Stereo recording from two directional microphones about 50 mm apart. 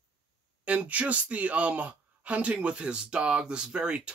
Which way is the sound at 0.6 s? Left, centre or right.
Right.